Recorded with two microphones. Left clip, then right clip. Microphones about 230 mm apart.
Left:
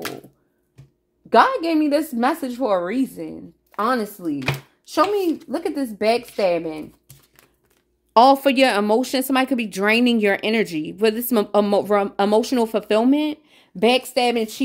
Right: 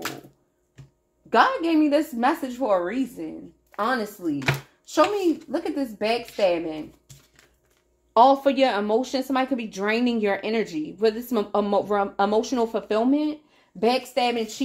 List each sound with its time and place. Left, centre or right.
1.3 s speech: left
5.5 s speech: left
8.1 s speech: left